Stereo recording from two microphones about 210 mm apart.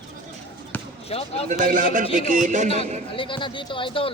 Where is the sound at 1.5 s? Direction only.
40° right (ahead or behind).